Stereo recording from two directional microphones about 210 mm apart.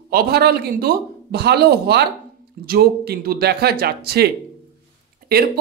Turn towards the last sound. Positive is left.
turn(degrees=-45)  # may be behind; listen again after turning